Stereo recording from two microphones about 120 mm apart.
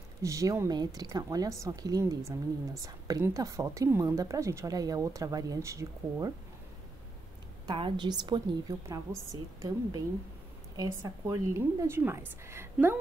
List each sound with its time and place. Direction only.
0.2 s a woman's voice: 25° right (ahead or behind)
7.6 s a woman's voice: 45° right (ahead or behind); by 12.6 s 20° right (ahead or behind)